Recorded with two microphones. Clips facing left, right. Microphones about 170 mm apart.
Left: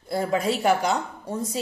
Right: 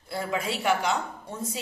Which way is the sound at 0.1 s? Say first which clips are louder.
Left 6 dB; 40° left (ahead or behind).